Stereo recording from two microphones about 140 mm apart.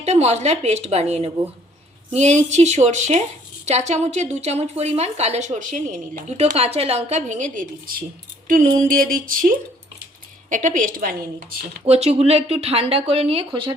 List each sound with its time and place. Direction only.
0.0 s a woman's voice: 50° right (ahead or behind)
8.4 s a sound: 85° right
10.5 s a woman's voice: 65° right (ahead or behind)
11.9 s a woman's voice: 45° right (ahead or behind)